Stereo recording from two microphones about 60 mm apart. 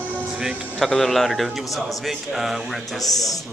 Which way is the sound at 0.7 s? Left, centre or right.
Centre.